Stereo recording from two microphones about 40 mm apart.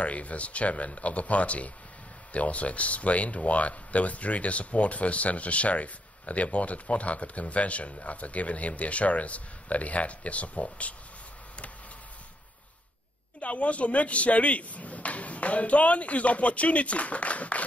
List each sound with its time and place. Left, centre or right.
0.0 s speech: left
13.4 s speech: left